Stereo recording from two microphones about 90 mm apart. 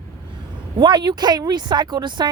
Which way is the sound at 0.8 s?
55° right (ahead or behind).